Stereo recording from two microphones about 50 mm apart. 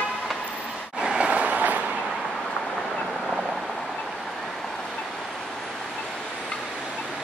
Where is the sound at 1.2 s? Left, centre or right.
Right.